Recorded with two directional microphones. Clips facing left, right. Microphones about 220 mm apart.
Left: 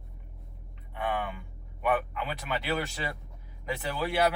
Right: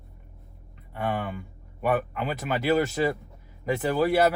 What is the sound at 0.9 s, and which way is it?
Speech, 45° right (ahead or behind).